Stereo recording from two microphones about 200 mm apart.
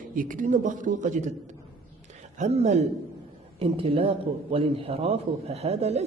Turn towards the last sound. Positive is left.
turn(degrees=-35)  # may be behind; listen again after turning